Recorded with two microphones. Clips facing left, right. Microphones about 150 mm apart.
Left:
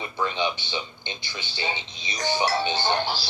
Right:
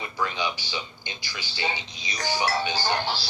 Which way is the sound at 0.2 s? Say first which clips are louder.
Left 3 dB; 25° left (ahead or behind).